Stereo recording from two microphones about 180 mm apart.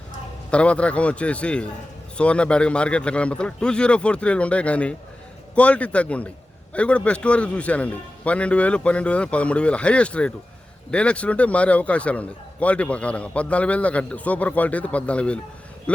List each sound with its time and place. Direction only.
0.5 s a man's voice: 5° left (ahead or behind)